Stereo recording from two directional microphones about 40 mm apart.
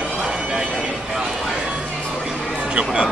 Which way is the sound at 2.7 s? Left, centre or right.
Right.